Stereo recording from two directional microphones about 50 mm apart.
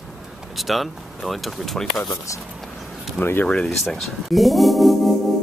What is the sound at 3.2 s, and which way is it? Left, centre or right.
Speech, left.